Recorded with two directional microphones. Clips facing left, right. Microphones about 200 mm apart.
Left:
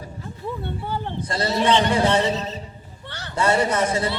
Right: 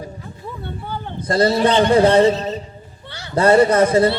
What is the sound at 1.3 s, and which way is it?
Speech, 40° right (ahead or behind).